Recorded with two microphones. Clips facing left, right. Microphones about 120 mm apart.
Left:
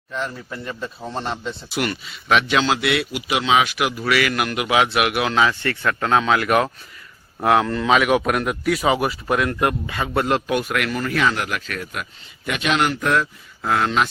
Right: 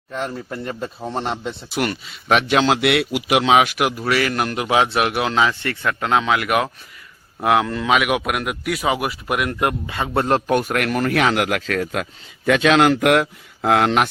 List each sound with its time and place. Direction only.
0.1 s a man's voice: 40° right (ahead or behind)
1.0 s a man's voice: 20° right (ahead or behind)
1.7 s a man's voice: 45° right (ahead or behind)
4.1 s a man's voice: 35° right (ahead or behind); by 9.4 s 5° right (ahead or behind)
9.4 s a man's voice: 15° right (ahead or behind)
10.2 s speech: 45° right (ahead or behind); by 14.1 s 60° right (ahead or behind)